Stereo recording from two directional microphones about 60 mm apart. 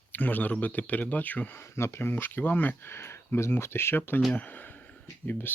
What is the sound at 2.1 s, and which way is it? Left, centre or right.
Speech, left.